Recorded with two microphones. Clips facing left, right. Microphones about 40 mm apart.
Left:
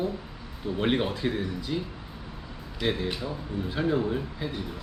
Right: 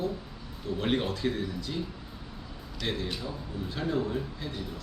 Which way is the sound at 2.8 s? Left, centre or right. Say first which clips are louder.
Left 5 dB; centre.